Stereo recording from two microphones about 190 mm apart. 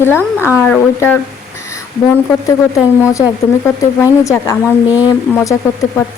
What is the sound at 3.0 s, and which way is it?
A woman's voice, 15° left (ahead or behind).